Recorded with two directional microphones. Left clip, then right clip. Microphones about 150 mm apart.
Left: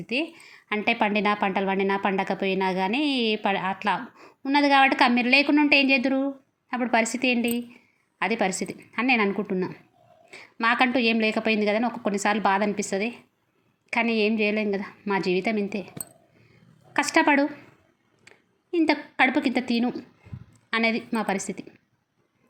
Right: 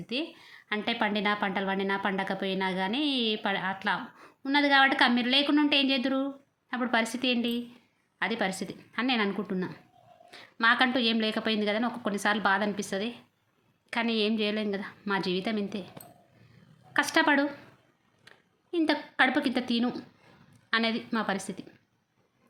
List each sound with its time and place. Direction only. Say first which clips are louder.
0.1 s a woman's voice: left 6 dB; 20° left (ahead or behind)
16.9 s a woman's voice: left 4 dB; 15° left (ahead or behind)